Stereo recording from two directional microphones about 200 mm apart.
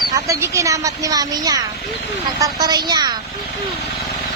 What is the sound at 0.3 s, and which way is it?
A woman's voice, 15° right (ahead or behind).